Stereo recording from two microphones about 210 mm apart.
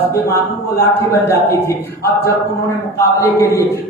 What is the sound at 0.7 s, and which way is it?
A man's voice, 15° left (ahead or behind).